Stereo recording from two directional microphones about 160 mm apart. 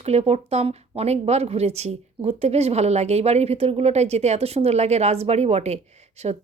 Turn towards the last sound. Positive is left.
turn(degrees=-45)  # may be behind; listen again after turning